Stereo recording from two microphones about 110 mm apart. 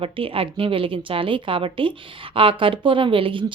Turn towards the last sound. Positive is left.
turn(degrees=-50)  # may be behind; listen again after turning